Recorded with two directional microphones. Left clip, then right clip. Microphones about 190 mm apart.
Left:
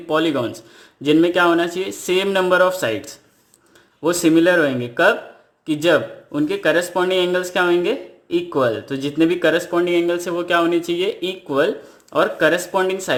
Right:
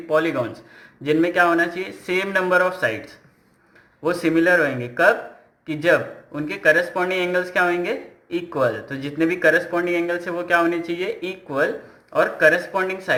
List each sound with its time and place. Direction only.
0.1 s speech: 60° left (ahead or behind)